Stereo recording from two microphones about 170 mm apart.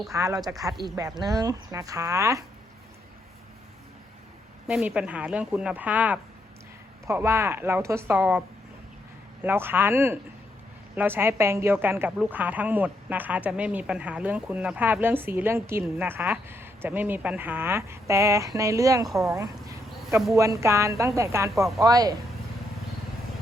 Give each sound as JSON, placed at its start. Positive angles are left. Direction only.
{"t": 0.1, "sound": "speech", "side_deg": -20}
{"t": 4.7, "sound": "a woman's voice", "side_deg": -5}
{"t": 19.0, "sound": "speech", "side_deg": 0}
{"t": 19.3, "sound": "a sound", "side_deg": -20}
{"t": 20.3, "sound": "a woman's voice", "side_deg": -20}